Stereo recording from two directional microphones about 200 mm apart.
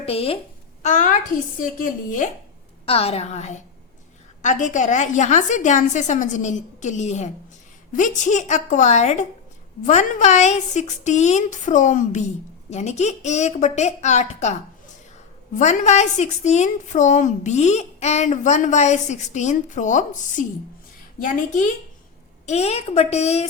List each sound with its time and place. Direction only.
0.0 s a woman's voice: 30° left (ahead or behind)
2.8 s a woman's voice: 30° left (ahead or behind)
15.5 s a woman's voice: 35° left (ahead or behind)